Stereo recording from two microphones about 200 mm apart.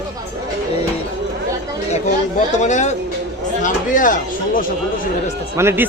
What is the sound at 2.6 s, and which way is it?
Speech, 35° left (ahead or behind).